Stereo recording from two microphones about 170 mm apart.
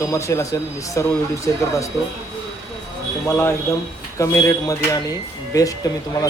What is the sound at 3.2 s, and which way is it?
Speech, 15° left (ahead or behind).